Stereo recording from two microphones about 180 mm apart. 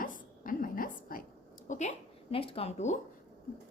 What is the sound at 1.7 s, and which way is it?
A woman's voice, 40° left (ahead or behind).